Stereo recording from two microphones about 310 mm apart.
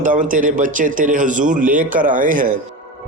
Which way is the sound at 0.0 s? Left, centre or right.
Right.